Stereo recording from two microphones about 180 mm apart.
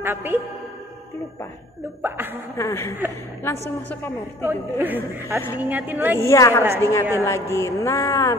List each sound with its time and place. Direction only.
0.0 s a woman's voice: 10° right (ahead or behind)
2.0 s a woman's voice: 10° right (ahead or behind)
2.5 s speech: 15° left (ahead or behind)
4.5 s a woman's voice: 10° right (ahead or behind)
6.1 s speech: 15° left (ahead or behind)
6.6 s a woman's voice: 15° right (ahead or behind)
7.2 s speech: 15° left (ahead or behind)